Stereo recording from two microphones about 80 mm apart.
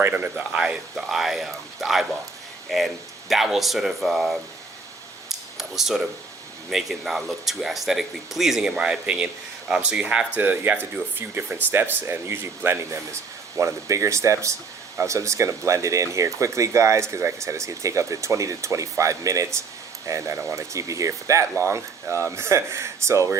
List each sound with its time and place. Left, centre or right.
0.1 s speech: centre
5.3 s a sound: centre
6.7 s speech: centre; by 13.0 s right
13.6 s speech: right